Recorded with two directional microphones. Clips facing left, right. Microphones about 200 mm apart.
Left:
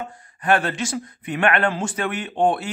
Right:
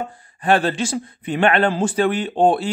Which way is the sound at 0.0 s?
30° right (ahead or behind).